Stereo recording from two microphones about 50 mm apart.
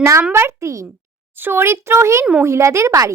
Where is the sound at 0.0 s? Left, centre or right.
Right.